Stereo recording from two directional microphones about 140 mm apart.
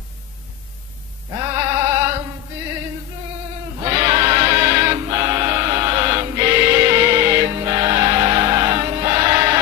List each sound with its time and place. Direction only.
1.4 s bleat: 25° right (ahead or behind)
3.8 s choir: 30° right (ahead or behind)